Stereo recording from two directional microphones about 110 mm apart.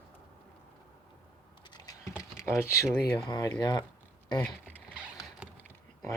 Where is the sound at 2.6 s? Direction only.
25° left (ahead or behind).